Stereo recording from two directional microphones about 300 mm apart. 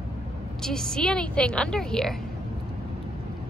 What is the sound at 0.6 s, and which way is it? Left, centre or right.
Speech, centre.